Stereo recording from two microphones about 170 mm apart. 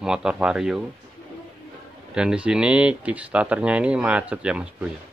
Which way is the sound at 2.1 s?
5° right (ahead or behind).